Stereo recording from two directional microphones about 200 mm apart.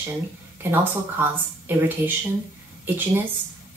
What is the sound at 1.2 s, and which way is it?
Speech, 10° right (ahead or behind).